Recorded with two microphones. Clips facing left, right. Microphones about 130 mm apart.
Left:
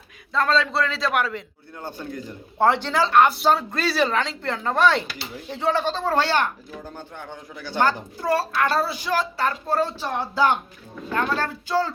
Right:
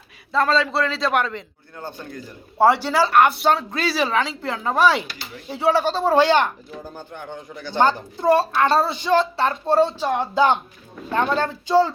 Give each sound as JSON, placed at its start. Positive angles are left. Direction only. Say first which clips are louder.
{"t": 0.3, "sound": "speech", "louder": "right 2 dB", "side_deg": 0}
{"t": 2.6, "sound": "speech", "louder": "right 3 dB", "side_deg": -10}
{"t": 6.9, "sound": "speech", "louder": "right 3 dB", "side_deg": 0}
{"t": 7.8, "sound": "a woman's voice", "louder": "right 3 dB", "side_deg": -25}